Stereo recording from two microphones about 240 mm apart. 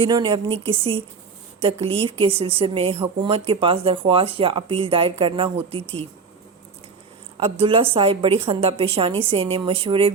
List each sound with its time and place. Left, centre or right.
0.0 s speech: centre
7.3 s speech: right